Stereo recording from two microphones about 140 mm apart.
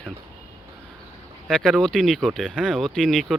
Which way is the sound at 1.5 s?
5° left (ahead or behind).